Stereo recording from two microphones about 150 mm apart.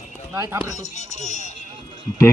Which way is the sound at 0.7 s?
50° left (ahead or behind).